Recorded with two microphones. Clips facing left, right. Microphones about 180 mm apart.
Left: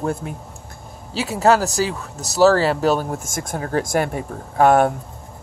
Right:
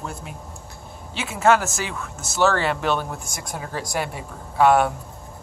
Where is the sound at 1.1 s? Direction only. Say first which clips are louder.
Left 2 dB; 35° left (ahead or behind).